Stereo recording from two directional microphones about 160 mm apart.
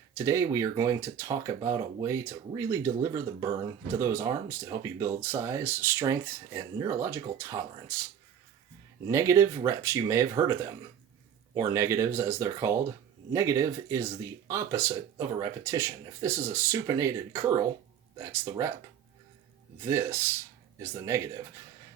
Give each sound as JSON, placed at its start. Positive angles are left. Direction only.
{"t": 0.1, "sound": "speech", "side_deg": -15}
{"t": 9.0, "sound": "speech", "side_deg": -20}
{"t": 19.8, "sound": "speech", "side_deg": -15}